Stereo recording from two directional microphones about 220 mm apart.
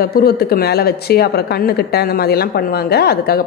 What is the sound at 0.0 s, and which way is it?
Speech, 45° left (ahead or behind).